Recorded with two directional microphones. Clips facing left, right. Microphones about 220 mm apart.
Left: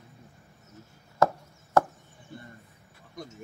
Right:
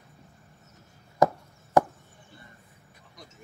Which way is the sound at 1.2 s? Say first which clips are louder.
Right 2 dB; 15° right (ahead or behind).